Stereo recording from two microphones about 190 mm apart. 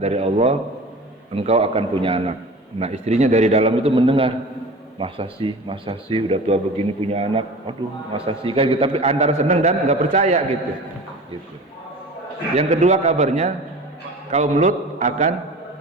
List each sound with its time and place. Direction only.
0.0 s a man's voice: 35° right (ahead or behind)
12.5 s a man's voice: 35° right (ahead or behind)